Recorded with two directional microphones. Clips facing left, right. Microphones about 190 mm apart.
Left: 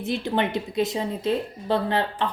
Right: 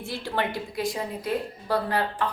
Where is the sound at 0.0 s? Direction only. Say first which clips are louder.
Left 5 dB; 20° left (ahead or behind).